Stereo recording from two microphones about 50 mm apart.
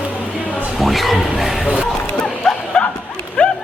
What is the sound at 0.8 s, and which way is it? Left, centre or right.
Speech, centre.